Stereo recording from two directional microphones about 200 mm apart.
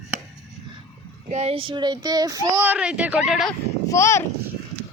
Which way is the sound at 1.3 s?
30° right (ahead or behind).